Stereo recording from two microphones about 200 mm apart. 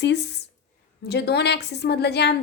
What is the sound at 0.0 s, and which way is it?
A woman's voice, 60° left (ahead or behind).